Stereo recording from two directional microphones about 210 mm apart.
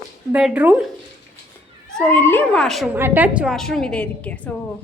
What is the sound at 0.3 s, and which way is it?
Speech, 5° right (ahead or behind).